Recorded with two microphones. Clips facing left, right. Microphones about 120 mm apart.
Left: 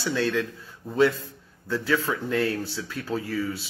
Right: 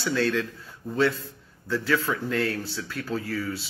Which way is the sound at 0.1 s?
15° left (ahead or behind).